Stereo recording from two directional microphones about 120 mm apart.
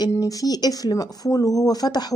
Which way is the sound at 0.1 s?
30° left (ahead or behind).